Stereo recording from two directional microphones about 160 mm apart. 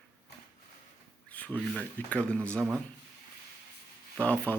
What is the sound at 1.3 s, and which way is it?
Speech, 10° left (ahead or behind).